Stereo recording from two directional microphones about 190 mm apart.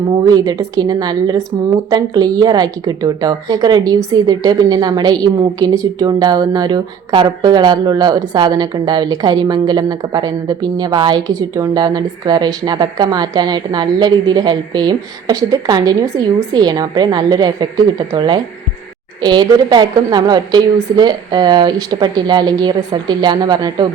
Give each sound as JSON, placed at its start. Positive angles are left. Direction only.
{"t": 0.3, "sound": "a woman's voice", "side_deg": -20}